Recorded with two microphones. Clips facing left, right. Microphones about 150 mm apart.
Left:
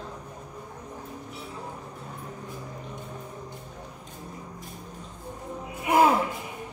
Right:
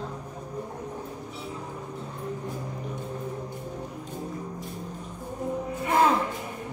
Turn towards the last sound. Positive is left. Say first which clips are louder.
# left 2 dB
turn(degrees=10)  # may be behind; listen again after turning